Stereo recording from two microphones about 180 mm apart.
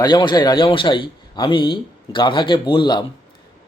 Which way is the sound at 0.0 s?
25° left (ahead or behind).